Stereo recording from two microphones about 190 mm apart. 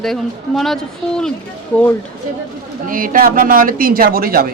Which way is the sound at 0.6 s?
Centre (ahead or behind).